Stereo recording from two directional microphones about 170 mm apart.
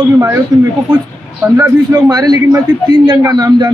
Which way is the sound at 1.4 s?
20° right (ahead or behind).